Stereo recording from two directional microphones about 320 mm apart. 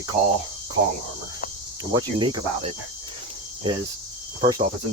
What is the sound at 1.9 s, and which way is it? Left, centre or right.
Speech, centre.